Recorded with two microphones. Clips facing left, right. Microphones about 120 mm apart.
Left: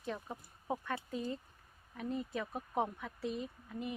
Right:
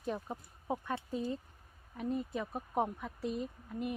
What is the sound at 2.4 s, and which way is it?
Speech, 5° right (ahead or behind).